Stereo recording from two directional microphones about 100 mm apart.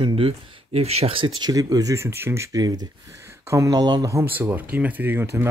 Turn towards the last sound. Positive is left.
turn(degrees=-25)  # may be behind; listen again after turning